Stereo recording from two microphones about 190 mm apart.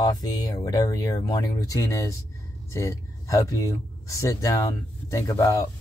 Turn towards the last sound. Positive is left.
turn(degrees=15)  # may be behind; listen again after turning